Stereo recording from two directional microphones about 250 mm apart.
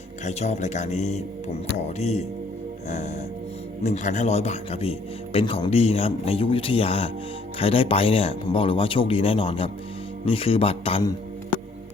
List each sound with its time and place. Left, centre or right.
0.3 s a man's voice: left
3.8 s a man's voice: left